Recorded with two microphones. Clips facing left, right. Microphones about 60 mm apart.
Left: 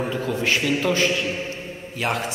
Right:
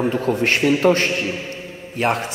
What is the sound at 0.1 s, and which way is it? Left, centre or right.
A man's voice, right.